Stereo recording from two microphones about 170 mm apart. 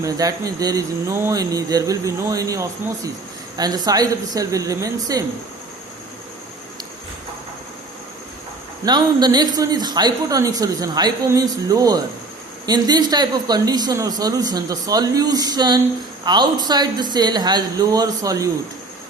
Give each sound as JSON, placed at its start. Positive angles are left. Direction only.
{"t": 0.0, "sound": "a woman's voice", "side_deg": -20}
{"t": 8.8, "sound": "a woman's voice", "side_deg": -25}